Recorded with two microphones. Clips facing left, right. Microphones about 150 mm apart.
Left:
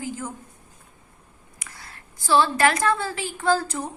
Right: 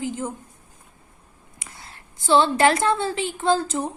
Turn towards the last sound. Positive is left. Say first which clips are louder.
# right 2 dB
turn(degrees=-20)  # may be behind; listen again after turning